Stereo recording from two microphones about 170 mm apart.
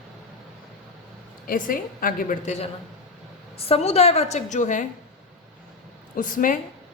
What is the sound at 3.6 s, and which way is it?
A woman's voice, 35° left (ahead or behind).